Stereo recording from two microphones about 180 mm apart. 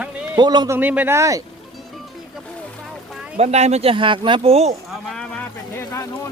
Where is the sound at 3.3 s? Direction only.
35° right (ahead or behind).